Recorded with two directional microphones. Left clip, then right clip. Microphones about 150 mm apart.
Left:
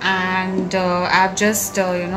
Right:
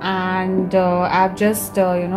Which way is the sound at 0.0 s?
65° right (ahead or behind).